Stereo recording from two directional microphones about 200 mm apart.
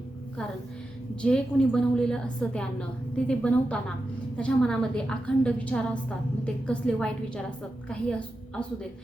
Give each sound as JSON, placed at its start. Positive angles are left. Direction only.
{"t": 1.2, "sound": "a woman's voice", "side_deg": 5}